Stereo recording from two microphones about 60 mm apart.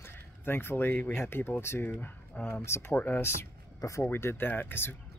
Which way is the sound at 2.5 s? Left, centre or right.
Left.